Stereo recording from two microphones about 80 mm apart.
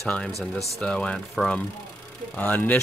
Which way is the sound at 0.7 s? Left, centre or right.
Centre.